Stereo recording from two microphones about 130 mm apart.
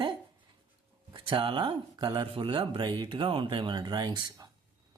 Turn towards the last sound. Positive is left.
turn(degrees=-30)  # may be behind; listen again after turning